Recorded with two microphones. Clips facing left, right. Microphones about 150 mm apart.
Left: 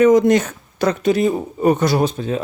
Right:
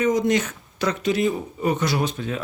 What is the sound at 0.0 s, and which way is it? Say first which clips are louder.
Speech: left 9 dB; 90° left.